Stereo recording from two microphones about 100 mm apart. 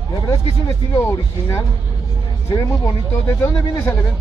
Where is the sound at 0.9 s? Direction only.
30° left (ahead or behind).